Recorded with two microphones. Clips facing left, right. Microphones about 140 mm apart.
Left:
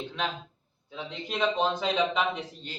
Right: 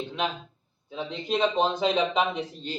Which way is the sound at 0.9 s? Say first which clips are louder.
Right 6 dB; 20° right (ahead or behind).